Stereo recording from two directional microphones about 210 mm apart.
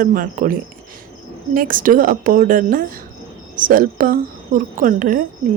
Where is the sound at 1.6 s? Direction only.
40° right (ahead or behind).